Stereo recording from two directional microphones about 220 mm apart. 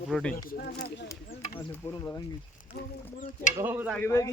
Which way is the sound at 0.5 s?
45° left (ahead or behind).